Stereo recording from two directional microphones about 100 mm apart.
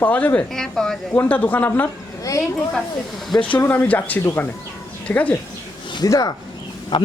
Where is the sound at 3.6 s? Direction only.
20° left (ahead or behind).